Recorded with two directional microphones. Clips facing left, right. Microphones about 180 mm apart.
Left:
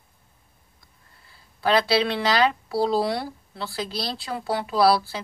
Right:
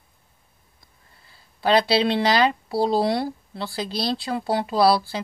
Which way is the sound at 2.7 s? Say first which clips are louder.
Right 2 dB; 25° right (ahead or behind).